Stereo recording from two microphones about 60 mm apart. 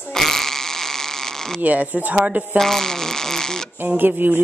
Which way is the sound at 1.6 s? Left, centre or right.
Right.